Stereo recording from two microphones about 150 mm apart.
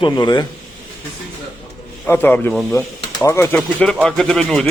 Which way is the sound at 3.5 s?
5° left (ahead or behind).